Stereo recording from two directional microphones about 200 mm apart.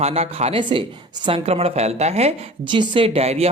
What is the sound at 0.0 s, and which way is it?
Speech, 30° right (ahead or behind).